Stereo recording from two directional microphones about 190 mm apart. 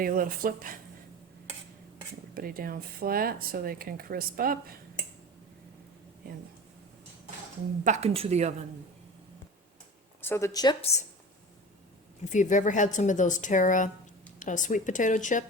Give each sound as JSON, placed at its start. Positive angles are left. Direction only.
{"t": 0.0, "sound": "speech", "side_deg": -50}
{"t": 2.3, "sound": "speech", "side_deg": -50}
{"t": 7.9, "sound": "speech", "side_deg": -35}
{"t": 10.2, "sound": "a woman's voice", "side_deg": 15}
{"t": 12.3, "sound": "speech", "side_deg": 40}